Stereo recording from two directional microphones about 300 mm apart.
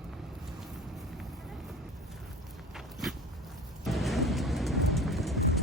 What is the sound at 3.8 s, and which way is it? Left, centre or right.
Music, centre.